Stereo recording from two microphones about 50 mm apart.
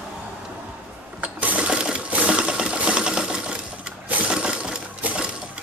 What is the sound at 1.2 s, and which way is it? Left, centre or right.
Sewing machine, right.